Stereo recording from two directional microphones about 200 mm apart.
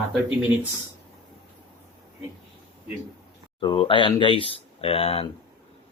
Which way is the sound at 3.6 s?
25° left (ahead or behind).